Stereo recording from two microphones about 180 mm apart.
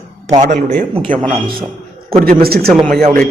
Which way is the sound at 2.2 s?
55° right (ahead or behind).